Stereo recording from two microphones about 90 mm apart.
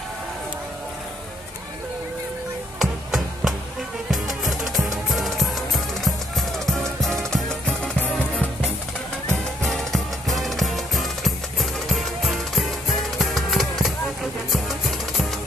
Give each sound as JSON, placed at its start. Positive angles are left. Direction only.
{"t": 2.8, "sound": "music", "side_deg": -5}
{"t": 8.0, "sound": "music", "side_deg": 20}
{"t": 9.6, "sound": "music", "side_deg": 0}